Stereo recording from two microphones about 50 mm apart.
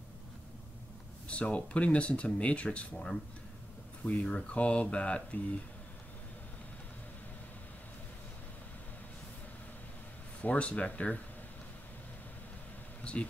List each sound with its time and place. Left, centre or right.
1.2 s speech: left
10.4 s speech: left
13.0 s speech: left